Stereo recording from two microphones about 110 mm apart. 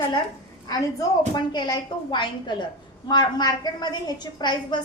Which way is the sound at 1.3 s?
40° left (ahead or behind).